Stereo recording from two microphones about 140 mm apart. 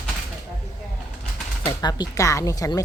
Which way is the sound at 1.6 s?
30° left (ahead or behind).